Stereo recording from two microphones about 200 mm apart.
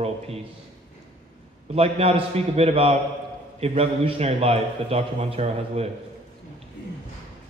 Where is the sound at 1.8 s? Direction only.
30° right (ahead or behind).